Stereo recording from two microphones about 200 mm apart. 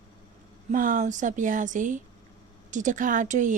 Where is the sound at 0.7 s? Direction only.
40° right (ahead or behind).